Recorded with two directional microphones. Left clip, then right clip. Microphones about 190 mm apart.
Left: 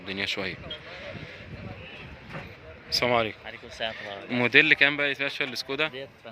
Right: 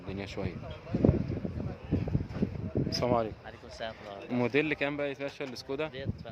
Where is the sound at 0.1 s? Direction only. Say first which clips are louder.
Left 9 dB; 5° right (ahead or behind).